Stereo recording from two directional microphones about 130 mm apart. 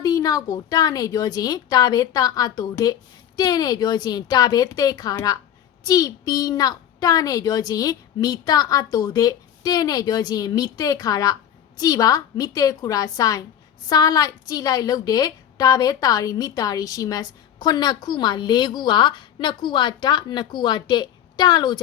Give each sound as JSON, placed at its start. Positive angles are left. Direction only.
{"t": 0.0, "sound": "a woman's voice", "side_deg": 30}